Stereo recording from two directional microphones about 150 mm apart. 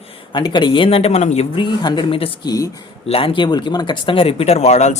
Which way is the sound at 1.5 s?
30° left (ahead or behind).